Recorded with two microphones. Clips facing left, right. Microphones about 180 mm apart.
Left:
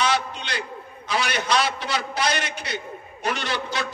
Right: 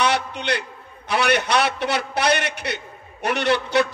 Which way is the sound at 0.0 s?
60° right (ahead or behind).